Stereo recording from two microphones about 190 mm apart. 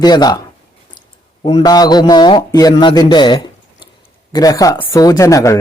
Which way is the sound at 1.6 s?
20° left (ahead or behind).